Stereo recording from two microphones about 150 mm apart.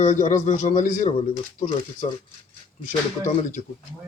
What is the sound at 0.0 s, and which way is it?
Speech, 55° left (ahead or behind).